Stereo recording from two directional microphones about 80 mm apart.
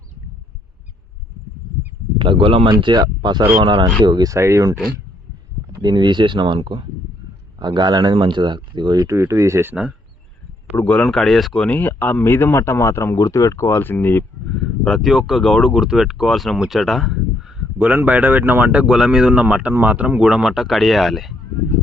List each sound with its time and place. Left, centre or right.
2.1 s speech: right
3.6 s speech: right
4.0 s speech: right
4.3 s speech: right
5.8 s speech: right
7.6 s speech: right
9.0 s speech: right
11.0 s speech: centre
11.6 s speech: left
14.5 s speech: centre
17.7 s speech: right; by 21.3 s centre